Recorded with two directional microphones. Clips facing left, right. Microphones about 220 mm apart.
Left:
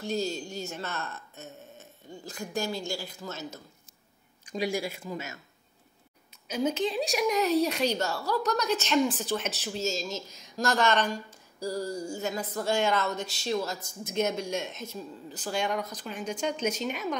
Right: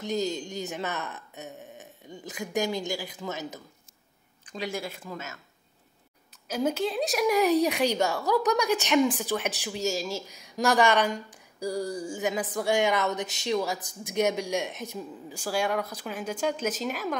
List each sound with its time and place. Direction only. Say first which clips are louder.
0.0 s speech: right 2 dB; 20° right (ahead or behind)
4.5 s speech: left 3 dB; 10° left (ahead or behind)
6.4 s speech: right 1 dB; 5° right (ahead or behind)
7.3 s speech: right 3 dB; 15° right (ahead or behind)